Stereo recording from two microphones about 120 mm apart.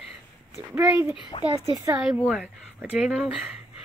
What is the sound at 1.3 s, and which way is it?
Speech, 40° left (ahead or behind).